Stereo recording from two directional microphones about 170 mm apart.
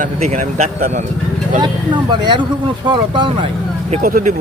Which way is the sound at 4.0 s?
55° right (ahead or behind).